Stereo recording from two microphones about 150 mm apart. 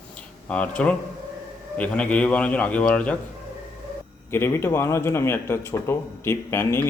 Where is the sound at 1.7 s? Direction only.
10° left (ahead or behind).